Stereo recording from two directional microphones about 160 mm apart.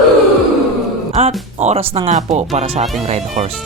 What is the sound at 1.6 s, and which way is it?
Speech, 40° right (ahead or behind).